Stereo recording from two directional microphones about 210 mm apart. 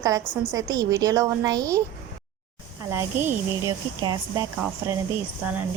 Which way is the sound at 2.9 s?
10° right (ahead or behind).